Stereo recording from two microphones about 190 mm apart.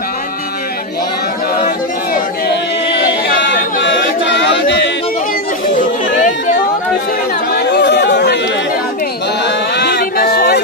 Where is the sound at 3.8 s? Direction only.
70° left (ahead or behind).